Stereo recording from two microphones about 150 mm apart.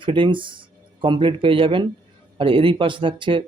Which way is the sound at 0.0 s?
35° right (ahead or behind).